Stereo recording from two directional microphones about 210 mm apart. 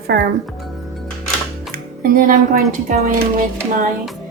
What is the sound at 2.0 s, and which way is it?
Speech, 40° right (ahead or behind).